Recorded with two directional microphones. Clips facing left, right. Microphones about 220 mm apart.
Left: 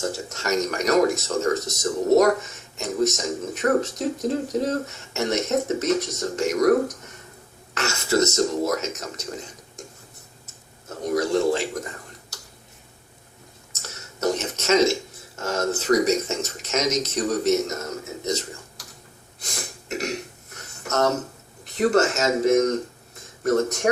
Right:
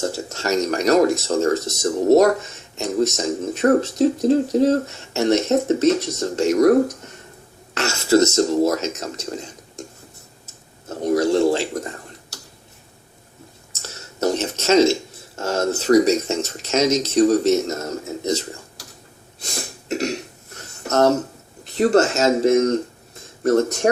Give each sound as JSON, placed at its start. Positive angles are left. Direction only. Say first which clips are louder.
{"t": 0.3, "sound": "speech", "louder": "right 4 dB", "side_deg": -30}
{"t": 10.4, "sound": "tick-tock", "louder": "right 6 dB", "side_deg": -30}
{"t": 14.2, "sound": "a sound", "louder": "right 3 dB", "side_deg": -30}
{"t": 15.4, "sound": "speech", "louder": "right 3 dB", "side_deg": -30}
{"t": 19.9, "sound": "cough", "louder": "right 5 dB", "side_deg": -30}
{"t": 20.8, "sound": "speech", "louder": "right 6 dB", "side_deg": -30}